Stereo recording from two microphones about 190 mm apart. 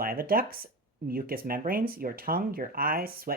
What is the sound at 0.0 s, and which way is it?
Speech, 50° right (ahead or behind).